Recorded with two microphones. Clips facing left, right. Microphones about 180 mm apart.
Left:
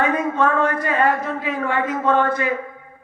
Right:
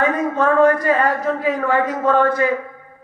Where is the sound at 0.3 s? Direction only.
40° right (ahead or behind).